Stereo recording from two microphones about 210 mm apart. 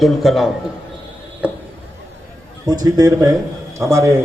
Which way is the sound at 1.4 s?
10° right (ahead or behind).